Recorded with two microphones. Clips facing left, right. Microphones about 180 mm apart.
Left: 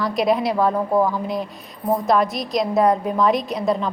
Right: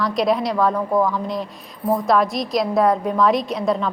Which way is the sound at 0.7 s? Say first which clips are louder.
Even; 25° left (ahead or behind).